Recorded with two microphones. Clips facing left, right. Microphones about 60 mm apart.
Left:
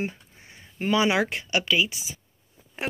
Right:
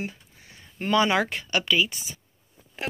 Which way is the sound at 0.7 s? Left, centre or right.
Centre.